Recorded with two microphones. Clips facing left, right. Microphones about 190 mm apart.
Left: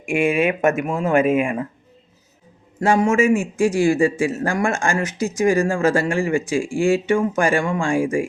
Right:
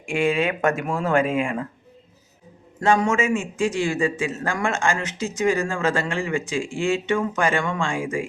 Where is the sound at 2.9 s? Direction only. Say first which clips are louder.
Left 4 dB; 25° left (ahead or behind).